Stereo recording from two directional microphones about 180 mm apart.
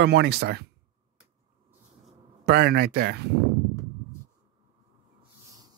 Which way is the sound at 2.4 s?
60° right (ahead or behind).